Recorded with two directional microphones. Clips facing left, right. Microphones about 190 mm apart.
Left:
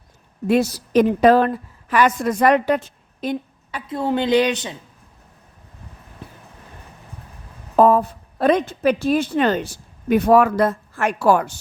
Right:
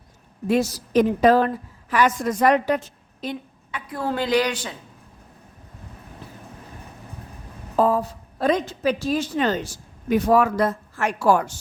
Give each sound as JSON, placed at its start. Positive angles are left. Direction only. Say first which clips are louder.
{"t": 0.4, "sound": "a woman's voice", "louder": "left 3 dB", "side_deg": 65}
{"t": 3.8, "sound": "speech", "louder": "left 4 dB", "side_deg": 25}
{"t": 7.8, "sound": "a woman's voice", "louder": "left 5 dB", "side_deg": 55}